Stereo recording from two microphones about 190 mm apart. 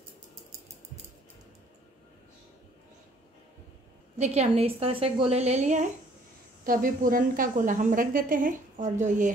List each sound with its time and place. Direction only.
4.2 s a woman's voice: 35° right (ahead or behind)
6.6 s a woman's voice: 50° right (ahead or behind)